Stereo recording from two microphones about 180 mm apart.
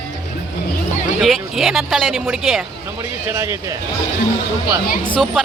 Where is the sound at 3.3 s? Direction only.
15° right (ahead or behind).